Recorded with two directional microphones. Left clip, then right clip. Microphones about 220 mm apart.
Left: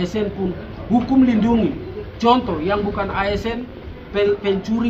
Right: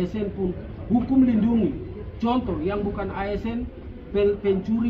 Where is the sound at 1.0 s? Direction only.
25° left (ahead or behind).